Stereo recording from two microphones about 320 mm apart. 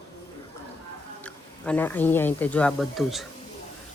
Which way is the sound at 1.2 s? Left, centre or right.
Centre.